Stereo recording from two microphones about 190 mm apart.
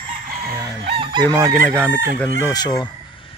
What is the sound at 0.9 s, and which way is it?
Chicken, 25° right (ahead or behind).